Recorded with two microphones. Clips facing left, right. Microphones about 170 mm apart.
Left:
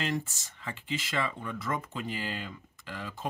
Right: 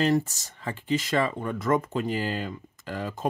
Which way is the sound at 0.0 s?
40° right (ahead or behind).